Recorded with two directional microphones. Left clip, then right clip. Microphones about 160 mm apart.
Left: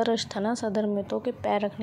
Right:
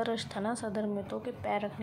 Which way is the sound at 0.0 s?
25° left (ahead or behind).